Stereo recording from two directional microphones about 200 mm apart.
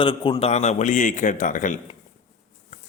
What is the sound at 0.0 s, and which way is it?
A man's voice, 25° left (ahead or behind).